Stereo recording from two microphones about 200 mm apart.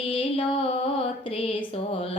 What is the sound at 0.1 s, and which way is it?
Music, 25° left (ahead or behind).